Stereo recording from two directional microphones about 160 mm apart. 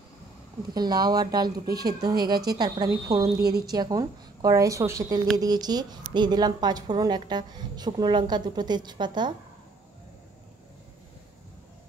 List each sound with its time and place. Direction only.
0.7 s a woman's voice: 25° right (ahead or behind)